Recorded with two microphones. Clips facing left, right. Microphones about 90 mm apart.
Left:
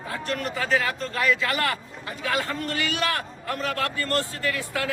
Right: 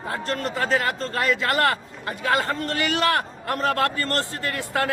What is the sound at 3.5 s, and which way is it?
A man's voice, 45° right (ahead or behind).